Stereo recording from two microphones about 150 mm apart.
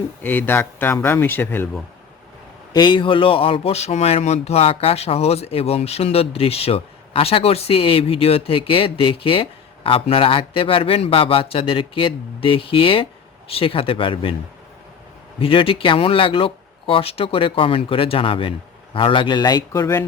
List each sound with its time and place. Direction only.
0.2 s speech: 10° left (ahead or behind)
2.7 s speech: 30° left (ahead or behind)
15.4 s a man's voice: 35° left (ahead or behind)